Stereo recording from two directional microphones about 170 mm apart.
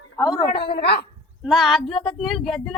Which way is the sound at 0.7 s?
70° left (ahead or behind).